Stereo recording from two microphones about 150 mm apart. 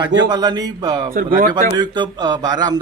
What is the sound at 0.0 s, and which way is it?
Speech, 30° right (ahead or behind).